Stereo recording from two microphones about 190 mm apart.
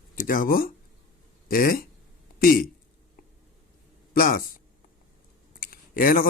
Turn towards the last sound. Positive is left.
turn(degrees=50)  # may be behind; listen again after turning